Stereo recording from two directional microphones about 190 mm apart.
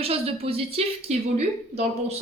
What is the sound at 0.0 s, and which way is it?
Speech, 30° right (ahead or behind).